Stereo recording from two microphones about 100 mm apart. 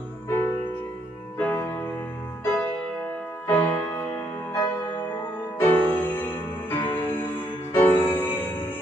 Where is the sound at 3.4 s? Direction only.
20° left (ahead or behind).